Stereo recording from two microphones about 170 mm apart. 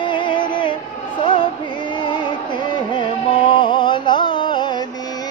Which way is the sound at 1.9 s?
25° left (ahead or behind).